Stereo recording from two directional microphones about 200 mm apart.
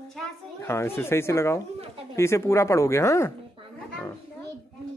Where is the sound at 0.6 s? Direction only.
15° left (ahead or behind).